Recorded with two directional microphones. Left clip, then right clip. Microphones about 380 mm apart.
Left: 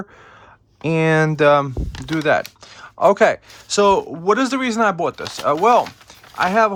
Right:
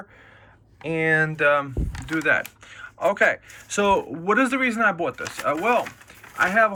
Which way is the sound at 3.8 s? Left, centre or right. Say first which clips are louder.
Left 6 dB; centre.